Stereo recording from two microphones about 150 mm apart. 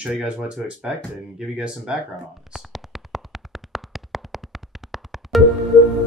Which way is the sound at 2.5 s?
Centre (ahead or behind).